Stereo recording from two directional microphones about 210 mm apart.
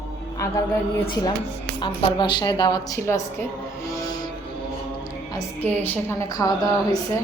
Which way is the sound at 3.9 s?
15° left (ahead or behind).